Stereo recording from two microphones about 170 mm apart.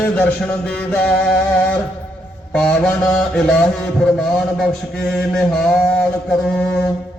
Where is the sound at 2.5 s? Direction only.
5° left (ahead or behind).